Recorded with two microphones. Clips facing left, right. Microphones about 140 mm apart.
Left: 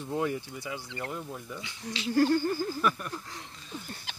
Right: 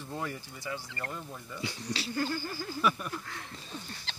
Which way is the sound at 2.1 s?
65° left (ahead or behind).